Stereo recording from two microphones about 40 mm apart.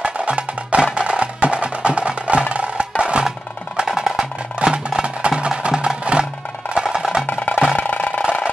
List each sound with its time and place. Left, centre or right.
0.0 s music: right
3.7 s music: centre
4.6 s music: right
7.2 s music: left